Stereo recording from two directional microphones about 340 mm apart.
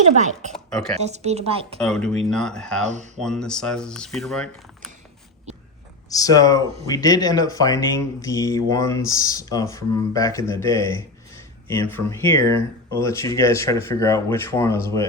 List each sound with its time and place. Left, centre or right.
0.2 s speech: centre
0.5 s speech: centre
0.9 s speech: centre
1.8 s speech: centre
2.8 s speech: right
3.2 s speech: centre
6.1 s speech: centre